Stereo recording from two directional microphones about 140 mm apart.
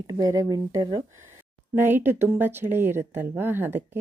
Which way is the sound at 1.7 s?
15° right (ahead or behind).